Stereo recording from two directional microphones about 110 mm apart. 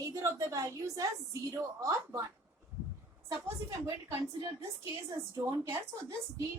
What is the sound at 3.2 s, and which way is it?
Speech, 35° right (ahead or behind).